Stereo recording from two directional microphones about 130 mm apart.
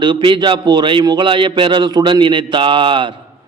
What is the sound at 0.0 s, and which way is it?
A man's voice, 40° right (ahead or behind).